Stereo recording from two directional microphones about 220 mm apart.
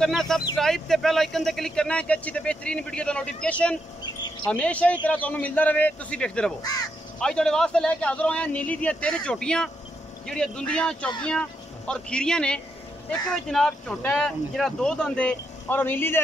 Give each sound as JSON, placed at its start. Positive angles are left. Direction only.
{"t": 0.0, "sound": "a man's voice", "side_deg": 0}
{"t": 6.6, "sound": "a man's voice", "side_deg": 15}
{"t": 7.2, "sound": "speech", "side_deg": 5}